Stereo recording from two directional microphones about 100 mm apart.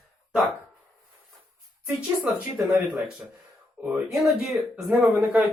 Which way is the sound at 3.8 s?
5° right (ahead or behind).